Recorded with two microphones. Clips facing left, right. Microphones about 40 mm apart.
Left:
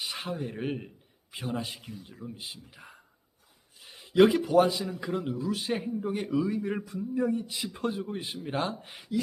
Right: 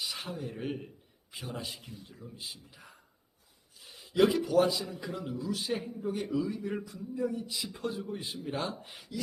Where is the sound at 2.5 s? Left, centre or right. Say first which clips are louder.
Left 4 dB; left.